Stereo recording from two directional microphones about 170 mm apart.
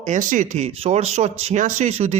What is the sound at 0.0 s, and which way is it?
Speech, 45° right (ahead or behind).